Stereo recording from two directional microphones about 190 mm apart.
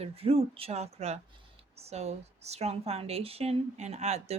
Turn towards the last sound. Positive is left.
turn(degrees=-35)  # may be behind; listen again after turning